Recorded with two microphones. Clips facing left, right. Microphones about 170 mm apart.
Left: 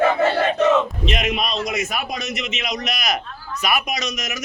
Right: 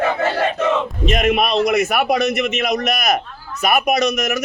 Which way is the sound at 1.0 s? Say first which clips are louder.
Right 6 dB; 50° right (ahead or behind).